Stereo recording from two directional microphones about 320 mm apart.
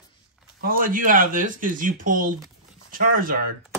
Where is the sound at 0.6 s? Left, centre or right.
Right.